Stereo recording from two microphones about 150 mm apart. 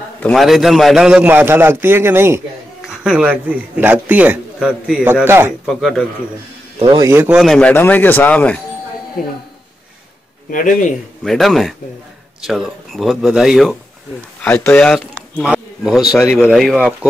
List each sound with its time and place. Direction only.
0.2 s a man's voice: centre (ahead or behind); by 5.5 s 15° right (ahead or behind)
5.7 s speech: centre (ahead or behind)
6.8 s a man's voice: 30° right (ahead or behind)
7.1 s a man's voice: 15° right (ahead or behind)
7.3 s a man's voice: 5° left (ahead or behind)
10.5 s a man's voice: 65° left (ahead or behind)
11.2 s speech: centre (ahead or behind)
14.4 s speech: 10° left (ahead or behind)